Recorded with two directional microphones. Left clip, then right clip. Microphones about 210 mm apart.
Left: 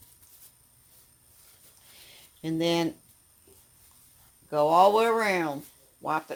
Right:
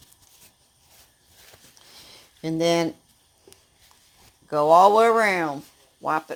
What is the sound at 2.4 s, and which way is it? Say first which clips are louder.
Speech: right 5 dB; 35° right (ahead or behind).